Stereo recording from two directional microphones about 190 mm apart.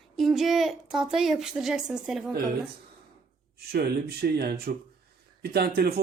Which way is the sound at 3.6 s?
55° right (ahead or behind).